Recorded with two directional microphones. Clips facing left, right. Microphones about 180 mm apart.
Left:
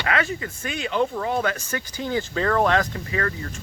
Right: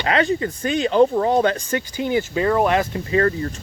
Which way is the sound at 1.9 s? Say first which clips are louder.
Right 4 dB; 15° right (ahead or behind).